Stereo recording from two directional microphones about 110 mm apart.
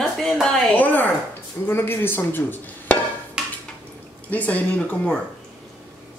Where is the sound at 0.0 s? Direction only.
5° left (ahead or behind).